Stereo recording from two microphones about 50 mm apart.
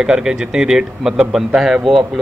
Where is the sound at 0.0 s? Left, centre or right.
Centre.